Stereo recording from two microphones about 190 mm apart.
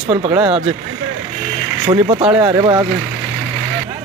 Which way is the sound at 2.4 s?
20° right (ahead or behind).